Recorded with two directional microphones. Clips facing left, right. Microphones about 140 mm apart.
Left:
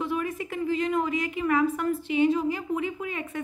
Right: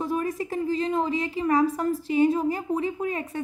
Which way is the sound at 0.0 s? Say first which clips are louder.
Right 2 dB; 40° right (ahead or behind).